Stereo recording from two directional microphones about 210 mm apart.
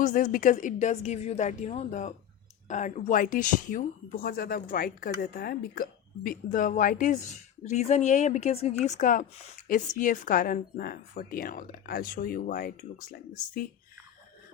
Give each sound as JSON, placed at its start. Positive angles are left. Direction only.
{"t": 0.0, "sound": "speech", "side_deg": 40}